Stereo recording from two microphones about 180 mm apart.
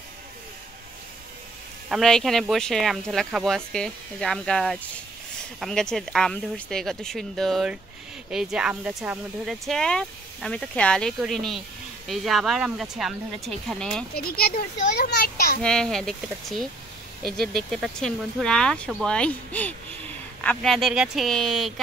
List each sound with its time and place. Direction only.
1.9 s speech: centre (ahead or behind)
14.1 s a child's voice: 60° left (ahead or behind)
15.6 s speech: 5° left (ahead or behind)